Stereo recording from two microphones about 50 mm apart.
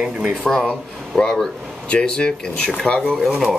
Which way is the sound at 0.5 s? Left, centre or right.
Centre.